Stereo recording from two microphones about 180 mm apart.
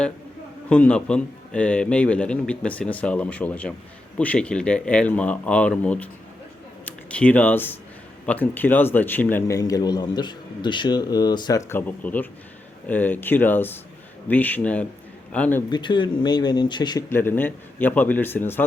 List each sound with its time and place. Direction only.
0.7 s a man's voice: 5° left (ahead or behind); by 11.6 s 25° left (ahead or behind)
11.7 s a man's voice: 10° left (ahead or behind)
15.7 s a man's voice: 25° left (ahead or behind)
17.1 s a man's voice: 10° left (ahead or behind)